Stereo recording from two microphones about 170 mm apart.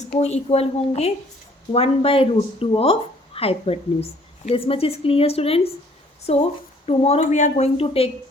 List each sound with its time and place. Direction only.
0.2 s speech: 40° left (ahead or behind)